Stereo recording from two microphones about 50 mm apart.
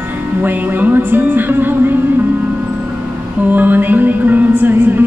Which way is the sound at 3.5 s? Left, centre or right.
Right.